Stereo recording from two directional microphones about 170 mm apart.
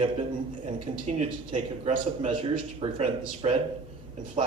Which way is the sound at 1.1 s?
40° right (ahead or behind).